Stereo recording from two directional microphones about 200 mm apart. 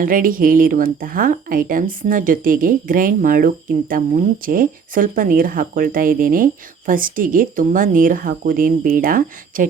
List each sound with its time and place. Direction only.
0.0 s a woman's voice: 45° right (ahead or behind)